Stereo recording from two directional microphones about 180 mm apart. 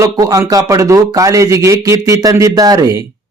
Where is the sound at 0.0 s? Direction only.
20° right (ahead or behind).